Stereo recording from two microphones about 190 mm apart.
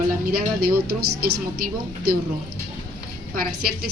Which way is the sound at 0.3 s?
55° right (ahead or behind).